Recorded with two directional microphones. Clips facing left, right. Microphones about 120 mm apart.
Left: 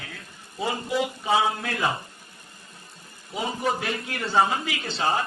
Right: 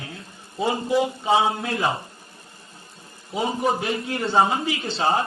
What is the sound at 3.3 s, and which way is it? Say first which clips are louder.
Speech: right 4 dB; 25° right (ahead or behind).